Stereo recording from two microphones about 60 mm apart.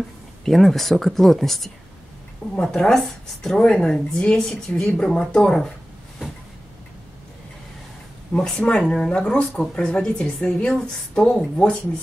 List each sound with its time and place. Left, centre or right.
0.5 s a woman's voice: centre
8.3 s a woman's voice: centre